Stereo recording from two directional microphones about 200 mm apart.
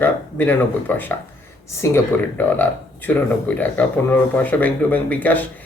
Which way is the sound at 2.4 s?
10° left (ahead or behind).